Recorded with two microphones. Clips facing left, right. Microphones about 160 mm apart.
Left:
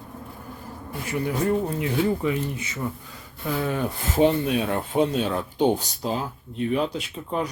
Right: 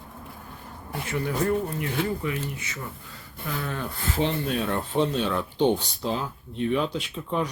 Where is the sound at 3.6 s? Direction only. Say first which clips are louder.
Left 5 dB; 15° left (ahead or behind).